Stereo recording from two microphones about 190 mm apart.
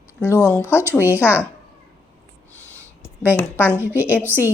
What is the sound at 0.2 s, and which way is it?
Speech, 15° left (ahead or behind).